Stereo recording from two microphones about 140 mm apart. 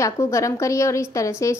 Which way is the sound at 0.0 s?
20° left (ahead or behind).